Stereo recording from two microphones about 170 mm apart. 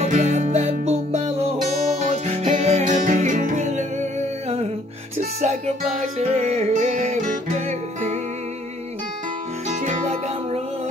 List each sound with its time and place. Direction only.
0.0 s music: 45° right (ahead or behind)
9.7 s music: 45° right (ahead or behind)